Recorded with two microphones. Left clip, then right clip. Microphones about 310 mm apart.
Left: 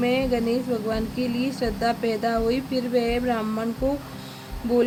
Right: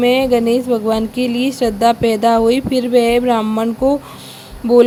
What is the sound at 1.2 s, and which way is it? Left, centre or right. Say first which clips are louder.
Speech: right 9 dB; right.